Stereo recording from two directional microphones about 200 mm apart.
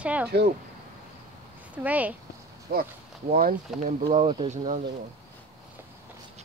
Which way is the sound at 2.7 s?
45° right (ahead or behind).